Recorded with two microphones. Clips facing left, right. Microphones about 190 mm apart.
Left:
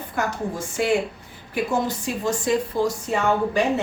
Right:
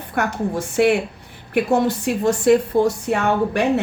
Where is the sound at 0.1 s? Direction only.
65° right (ahead or behind).